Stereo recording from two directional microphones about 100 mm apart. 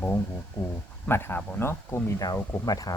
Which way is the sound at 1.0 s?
20° left (ahead or behind).